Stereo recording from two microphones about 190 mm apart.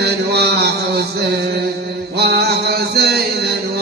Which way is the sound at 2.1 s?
60° right (ahead or behind).